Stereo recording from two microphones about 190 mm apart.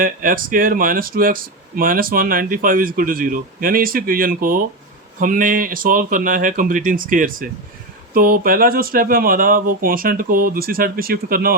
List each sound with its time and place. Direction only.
0.0 s speech: 45° right (ahead or behind)